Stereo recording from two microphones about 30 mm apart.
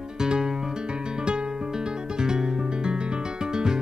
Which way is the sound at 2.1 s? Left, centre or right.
Right.